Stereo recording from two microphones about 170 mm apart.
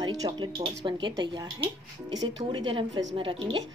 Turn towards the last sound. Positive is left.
turn(degrees=-30)  # may be behind; listen again after turning